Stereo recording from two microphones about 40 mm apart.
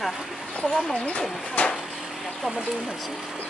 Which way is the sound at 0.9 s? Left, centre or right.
Left.